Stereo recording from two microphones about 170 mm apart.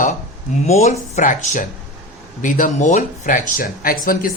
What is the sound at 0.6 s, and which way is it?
A man's voice, 40° left (ahead or behind).